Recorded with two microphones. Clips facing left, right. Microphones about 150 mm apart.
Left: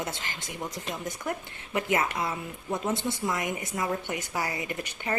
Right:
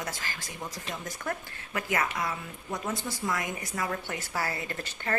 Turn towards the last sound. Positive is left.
turn(degrees=15)  # may be behind; listen again after turning